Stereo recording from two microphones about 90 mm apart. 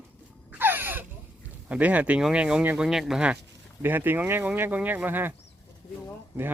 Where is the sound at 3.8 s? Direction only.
20° right (ahead or behind).